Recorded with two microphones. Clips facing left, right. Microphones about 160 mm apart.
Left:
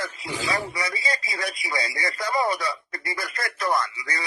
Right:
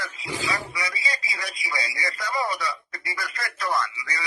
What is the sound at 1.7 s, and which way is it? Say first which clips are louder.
Speech: left 1 dB; 50° left (ahead or behind).